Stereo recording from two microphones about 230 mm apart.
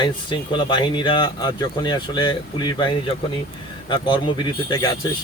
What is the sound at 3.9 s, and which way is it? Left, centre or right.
Speech, left.